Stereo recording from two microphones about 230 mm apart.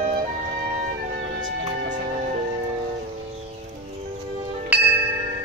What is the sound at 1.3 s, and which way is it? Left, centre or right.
Music, right.